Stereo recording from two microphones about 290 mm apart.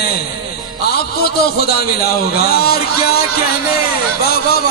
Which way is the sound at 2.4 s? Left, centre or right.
Left.